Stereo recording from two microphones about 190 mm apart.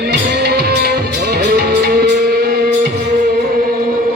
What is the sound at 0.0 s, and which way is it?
Music, 60° right (ahead or behind).